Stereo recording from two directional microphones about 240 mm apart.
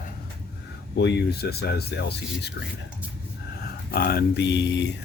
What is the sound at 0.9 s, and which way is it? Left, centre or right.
A man's voice, left.